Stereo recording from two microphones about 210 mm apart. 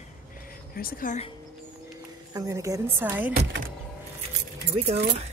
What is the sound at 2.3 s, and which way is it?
Speech, 15° right (ahead or behind).